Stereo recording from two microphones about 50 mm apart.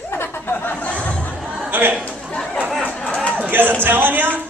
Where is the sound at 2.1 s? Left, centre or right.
Left.